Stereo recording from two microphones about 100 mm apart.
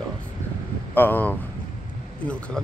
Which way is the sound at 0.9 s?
20° left (ahead or behind).